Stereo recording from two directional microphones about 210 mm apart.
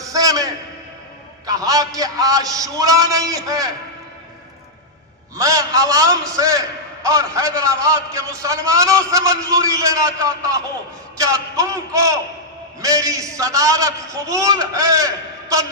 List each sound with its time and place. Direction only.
0.0 s a sound: 15° right (ahead or behind)
1.5 s a man's voice: 15° right (ahead or behind)
5.4 s a man's voice: 15° right (ahead or behind)